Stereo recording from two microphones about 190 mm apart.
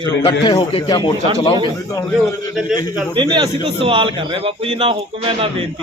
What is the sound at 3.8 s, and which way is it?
A man's voice, 25° right (ahead or behind).